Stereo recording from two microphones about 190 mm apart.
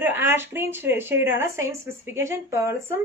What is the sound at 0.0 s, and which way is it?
A woman's voice, 10° right (ahead or behind).